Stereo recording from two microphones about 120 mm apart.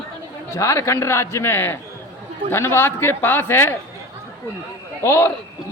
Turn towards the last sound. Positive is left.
turn(degrees=20)  # may be behind; listen again after turning